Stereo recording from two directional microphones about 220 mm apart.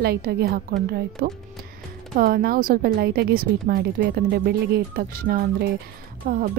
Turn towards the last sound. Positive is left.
turn(degrees=-40)  # may be behind; listen again after turning